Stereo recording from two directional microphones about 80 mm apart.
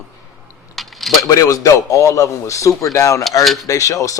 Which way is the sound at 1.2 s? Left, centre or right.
Left.